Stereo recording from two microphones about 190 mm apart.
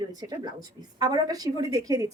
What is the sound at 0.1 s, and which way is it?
A woman's voice, 20° right (ahead or behind).